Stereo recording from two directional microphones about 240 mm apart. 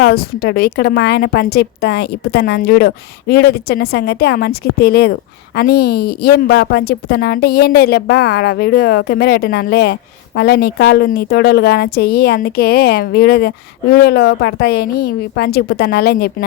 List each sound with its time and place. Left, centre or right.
0.0 s a woman's voice: left